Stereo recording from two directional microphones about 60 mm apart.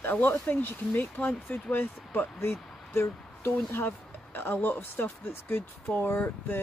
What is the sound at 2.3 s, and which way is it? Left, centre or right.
Speech, left.